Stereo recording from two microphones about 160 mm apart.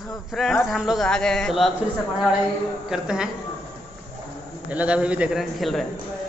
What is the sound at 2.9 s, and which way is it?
Speech, 5° right (ahead or behind).